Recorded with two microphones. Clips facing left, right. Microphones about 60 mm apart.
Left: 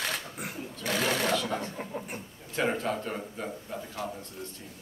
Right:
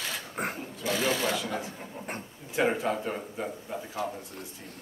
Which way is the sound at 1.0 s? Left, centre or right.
Left.